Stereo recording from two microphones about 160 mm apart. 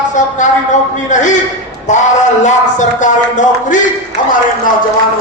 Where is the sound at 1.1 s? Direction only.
50° left (ahead or behind).